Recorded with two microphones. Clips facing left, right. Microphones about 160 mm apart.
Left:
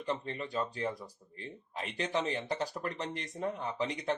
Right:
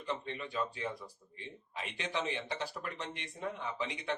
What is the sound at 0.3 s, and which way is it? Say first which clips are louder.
Speech: left 2 dB; 40° left (ahead or behind).